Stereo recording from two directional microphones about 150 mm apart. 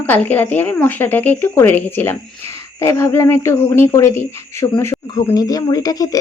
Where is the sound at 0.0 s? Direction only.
10° left (ahead or behind).